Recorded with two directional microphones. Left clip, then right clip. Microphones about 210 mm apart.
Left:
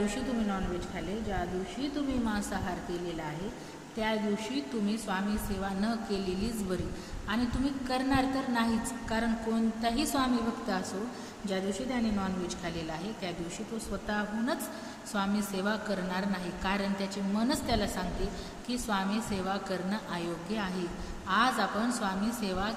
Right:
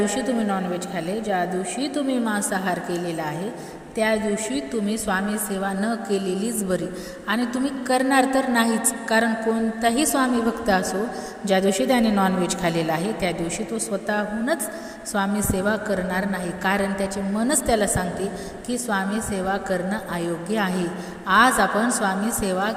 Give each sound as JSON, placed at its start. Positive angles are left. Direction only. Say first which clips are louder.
{"t": 0.1, "sound": "a woman's voice", "louder": "right 10 dB", "side_deg": -40}
{"t": 3.9, "sound": "a woman's voice", "louder": "right 10 dB", "side_deg": -35}
{"t": 7.9, "sound": "a woman's voice", "louder": "right 12 dB", "side_deg": -35}